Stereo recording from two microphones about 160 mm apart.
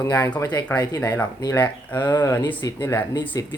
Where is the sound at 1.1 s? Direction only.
10° left (ahead or behind).